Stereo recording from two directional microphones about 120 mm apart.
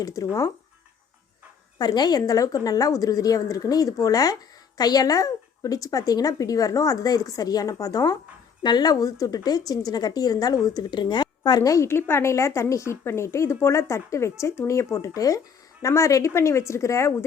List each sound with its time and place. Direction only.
0.0 s speech: 30° left (ahead or behind)
1.8 s a woman's voice: 35° left (ahead or behind)